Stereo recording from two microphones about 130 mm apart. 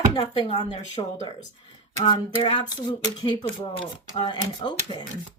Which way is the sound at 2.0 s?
40° left (ahead or behind).